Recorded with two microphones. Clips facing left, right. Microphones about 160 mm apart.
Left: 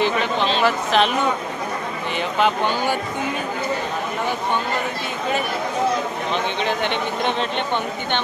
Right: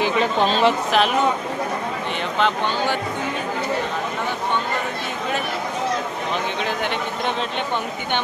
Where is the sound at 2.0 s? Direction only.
5° left (ahead or behind).